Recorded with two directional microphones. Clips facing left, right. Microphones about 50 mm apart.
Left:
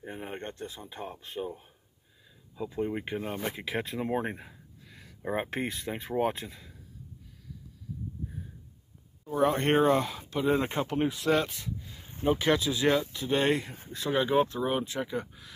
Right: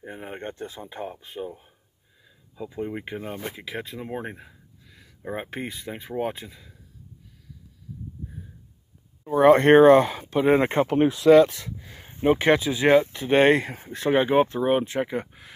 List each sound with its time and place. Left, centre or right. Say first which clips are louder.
0.0 s speech: right 3 dB; centre
0.7 s speech: right 5 dB; right
0.9 s speech: right 2 dB; centre
9.4 s speech: right 11 dB; right
10.3 s speech: right 8 dB; right
11.0 s speech: right 12 dB; right
12.3 s speech: right 6 dB; right
13.7 s speech: right 7 dB; right